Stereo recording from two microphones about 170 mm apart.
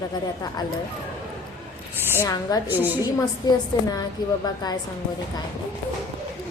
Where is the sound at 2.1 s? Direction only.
20° left (ahead or behind).